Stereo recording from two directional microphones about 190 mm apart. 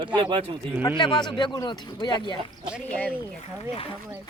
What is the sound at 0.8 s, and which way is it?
Speech, 25° left (ahead or behind).